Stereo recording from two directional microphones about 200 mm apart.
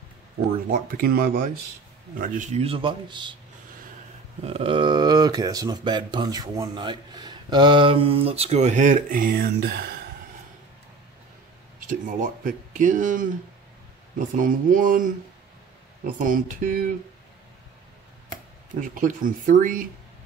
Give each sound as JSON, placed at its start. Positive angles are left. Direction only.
{"t": 0.7, "sound": "speech", "side_deg": -45}
{"t": 4.5, "sound": "speech", "side_deg": -30}
{"t": 11.8, "sound": "speech", "side_deg": -40}
{"t": 16.2, "sound": "speech", "side_deg": -40}
{"t": 18.8, "sound": "speech", "side_deg": -40}